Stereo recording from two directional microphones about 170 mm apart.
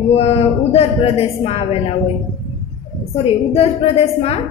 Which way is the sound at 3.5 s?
35° left (ahead or behind).